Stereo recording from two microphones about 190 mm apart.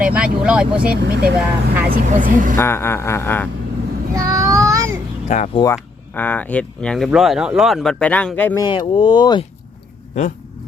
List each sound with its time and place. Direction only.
0.0 s speech: 5° right (ahead or behind)
1.0 s speech: 60° right (ahead or behind)
1.4 s speech: 5° right (ahead or behind)
1.9 s speech: 45° right (ahead or behind)
2.6 s a sound: 10° left (ahead or behind)
4.1 s child singing: 15° right (ahead or behind)
5.5 s speech: 15° left (ahead or behind)
8.6 s speech: 25° left (ahead or behind)